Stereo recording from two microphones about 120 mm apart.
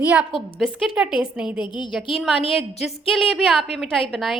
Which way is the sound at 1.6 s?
40° left (ahead or behind).